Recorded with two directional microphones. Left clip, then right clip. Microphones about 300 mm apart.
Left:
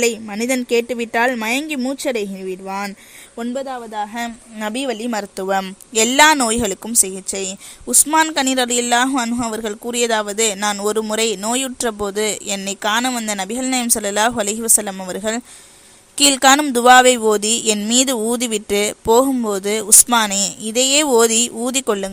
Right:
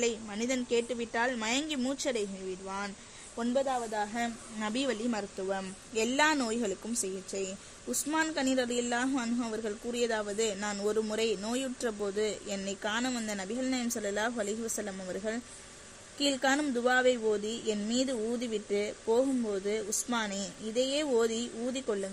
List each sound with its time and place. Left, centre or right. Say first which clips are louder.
0.0 s a woman's voice: left 13 dB; left